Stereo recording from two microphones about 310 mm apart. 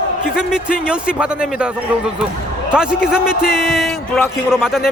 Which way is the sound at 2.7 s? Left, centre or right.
Centre.